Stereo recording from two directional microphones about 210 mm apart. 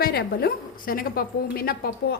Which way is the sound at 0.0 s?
50° left (ahead or behind).